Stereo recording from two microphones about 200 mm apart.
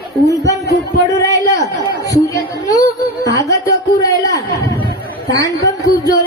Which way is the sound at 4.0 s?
15° left (ahead or behind).